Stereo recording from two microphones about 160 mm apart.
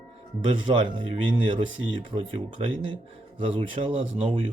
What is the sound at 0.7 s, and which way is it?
Speech, 30° right (ahead or behind).